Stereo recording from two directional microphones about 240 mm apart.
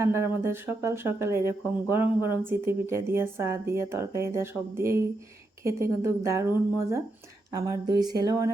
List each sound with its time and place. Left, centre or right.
0.0 s speech: centre
7.5 s speech: centre